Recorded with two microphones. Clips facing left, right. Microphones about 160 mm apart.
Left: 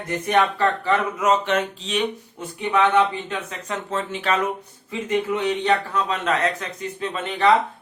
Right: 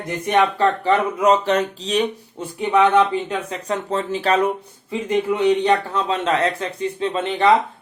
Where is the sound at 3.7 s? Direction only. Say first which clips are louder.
Right 5 dB; 35° right (ahead or behind).